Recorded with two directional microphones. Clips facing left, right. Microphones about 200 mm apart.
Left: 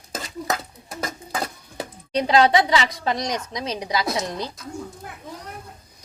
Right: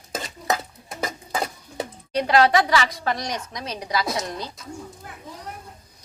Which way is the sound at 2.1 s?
20° left (ahead or behind).